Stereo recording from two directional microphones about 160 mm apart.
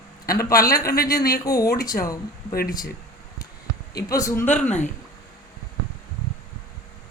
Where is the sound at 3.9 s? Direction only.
20° left (ahead or behind).